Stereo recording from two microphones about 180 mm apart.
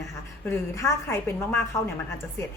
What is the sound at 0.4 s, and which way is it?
A woman's voice, 15° left (ahead or behind).